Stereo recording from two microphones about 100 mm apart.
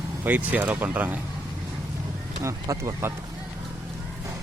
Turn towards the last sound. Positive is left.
turn(degrees=-25)  # may be behind; listen again after turning